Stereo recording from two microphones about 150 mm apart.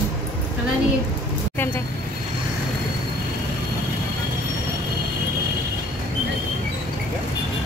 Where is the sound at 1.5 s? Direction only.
15° left (ahead or behind).